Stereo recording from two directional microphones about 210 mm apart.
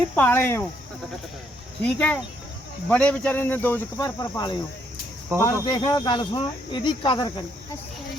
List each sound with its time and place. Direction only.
0.2 s speech: 10° left (ahead or behind)
1.8 s speech: 10° left (ahead or behind)